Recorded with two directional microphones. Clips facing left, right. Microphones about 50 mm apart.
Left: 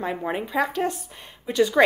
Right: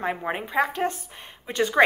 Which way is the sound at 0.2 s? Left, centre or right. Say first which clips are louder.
Left 1 dB; right.